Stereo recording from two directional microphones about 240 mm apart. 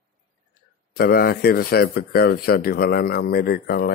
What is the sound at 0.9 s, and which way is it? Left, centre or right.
Speech, left.